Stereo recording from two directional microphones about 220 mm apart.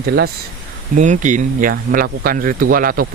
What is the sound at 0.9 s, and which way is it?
Speech, 35° right (ahead or behind).